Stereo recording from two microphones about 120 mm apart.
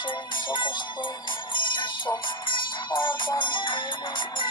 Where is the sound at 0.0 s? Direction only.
40° left (ahead or behind).